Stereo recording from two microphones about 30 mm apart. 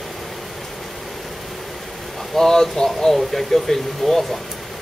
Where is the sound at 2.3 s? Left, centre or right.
Centre.